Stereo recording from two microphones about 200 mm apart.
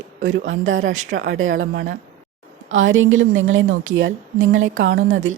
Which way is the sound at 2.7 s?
75° right (ahead or behind).